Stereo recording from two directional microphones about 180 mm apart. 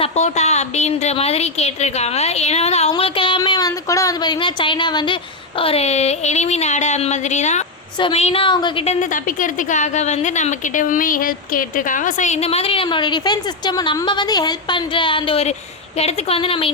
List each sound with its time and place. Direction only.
0.0 s a woman's voice: 40° left (ahead or behind)